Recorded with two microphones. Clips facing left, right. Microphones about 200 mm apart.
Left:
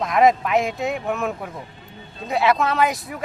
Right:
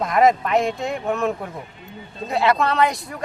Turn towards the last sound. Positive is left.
turn(degrees=5)  # may be behind; listen again after turning